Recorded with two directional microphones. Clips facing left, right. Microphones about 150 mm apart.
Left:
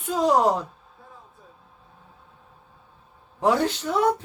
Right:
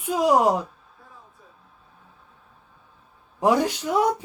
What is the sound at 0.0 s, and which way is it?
Speech, 10° right (ahead or behind).